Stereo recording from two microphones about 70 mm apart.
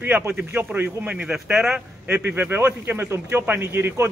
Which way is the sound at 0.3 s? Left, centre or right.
Right.